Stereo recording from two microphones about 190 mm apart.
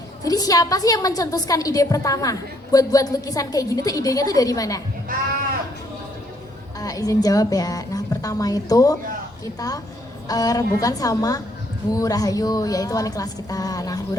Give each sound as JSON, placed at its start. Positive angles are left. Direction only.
{"t": 0.2, "sound": "a woman's voice", "side_deg": 20}
{"t": 6.7, "sound": "a woman's voice", "side_deg": 20}